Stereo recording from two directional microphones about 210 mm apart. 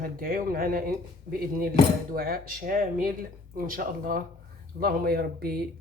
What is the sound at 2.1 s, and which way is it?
Speech, 45° right (ahead or behind).